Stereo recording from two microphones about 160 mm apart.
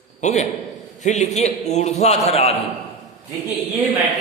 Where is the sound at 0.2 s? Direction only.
45° left (ahead or behind).